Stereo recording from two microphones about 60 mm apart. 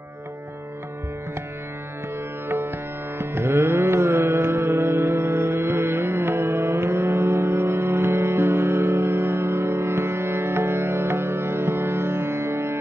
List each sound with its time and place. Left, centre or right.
2.4 s music: right